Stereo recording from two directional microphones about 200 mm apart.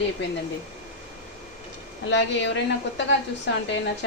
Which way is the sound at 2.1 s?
65° left (ahead or behind).